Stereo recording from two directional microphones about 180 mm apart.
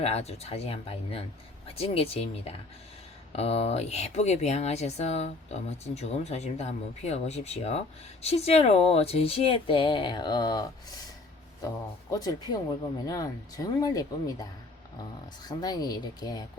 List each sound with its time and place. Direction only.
0.0 s speech: 35° left (ahead or behind)
12.1 s speech: 20° left (ahead or behind)
15.4 s speech: 20° left (ahead or behind)